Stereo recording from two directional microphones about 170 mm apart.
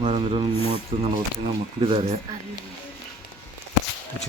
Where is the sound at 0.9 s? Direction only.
30° right (ahead or behind).